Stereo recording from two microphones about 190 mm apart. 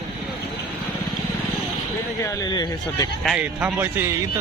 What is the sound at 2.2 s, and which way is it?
Speech, 20° left (ahead or behind).